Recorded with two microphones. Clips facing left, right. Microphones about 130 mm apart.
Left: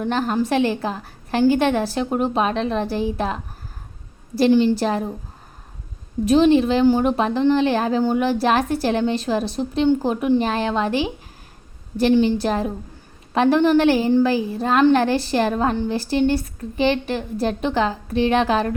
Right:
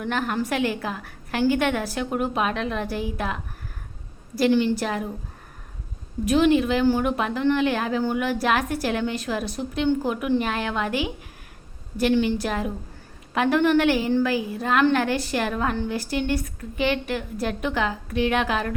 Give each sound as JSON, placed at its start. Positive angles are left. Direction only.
{"t": 0.0, "sound": "a woman's voice", "side_deg": 30}
{"t": 4.5, "sound": "a woman's voice", "side_deg": 25}
{"t": 6.2, "sound": "a woman's voice", "side_deg": 30}
{"t": 12.1, "sound": "a woman's voice", "side_deg": 30}